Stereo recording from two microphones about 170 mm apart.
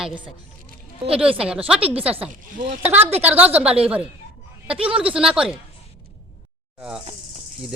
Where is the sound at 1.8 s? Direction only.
35° right (ahead or behind).